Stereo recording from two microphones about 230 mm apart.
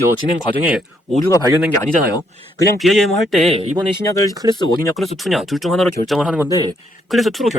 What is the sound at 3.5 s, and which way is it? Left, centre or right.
Speech, right.